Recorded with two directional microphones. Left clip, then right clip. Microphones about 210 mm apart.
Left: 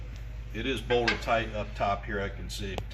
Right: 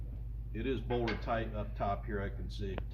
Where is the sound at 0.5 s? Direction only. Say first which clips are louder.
Left 8 dB; 30° left (ahead or behind).